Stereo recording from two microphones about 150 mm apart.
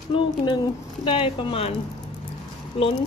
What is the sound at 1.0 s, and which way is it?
Speech, 35° left (ahead or behind).